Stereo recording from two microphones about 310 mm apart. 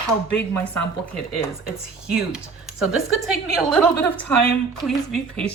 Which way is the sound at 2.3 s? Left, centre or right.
Centre.